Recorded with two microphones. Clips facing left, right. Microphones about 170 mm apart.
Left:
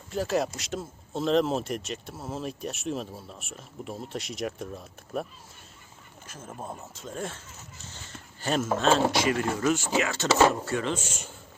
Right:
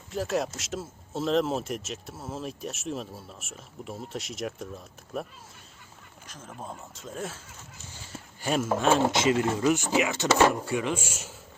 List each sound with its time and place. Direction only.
0.1 s speech: centre (ahead or behind)